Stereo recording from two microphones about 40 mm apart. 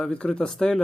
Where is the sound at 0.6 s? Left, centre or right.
Centre.